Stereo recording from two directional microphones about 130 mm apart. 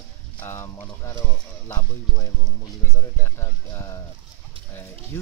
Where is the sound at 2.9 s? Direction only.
20° left (ahead or behind).